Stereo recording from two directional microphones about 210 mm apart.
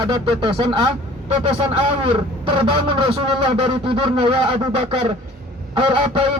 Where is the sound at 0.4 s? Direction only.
25° right (ahead or behind).